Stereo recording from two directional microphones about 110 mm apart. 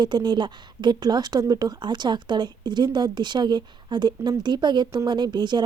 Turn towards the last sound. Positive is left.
turn(degrees=-45)  # may be behind; listen again after turning